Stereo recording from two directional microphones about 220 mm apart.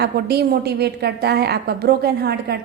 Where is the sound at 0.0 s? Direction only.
45° right (ahead or behind).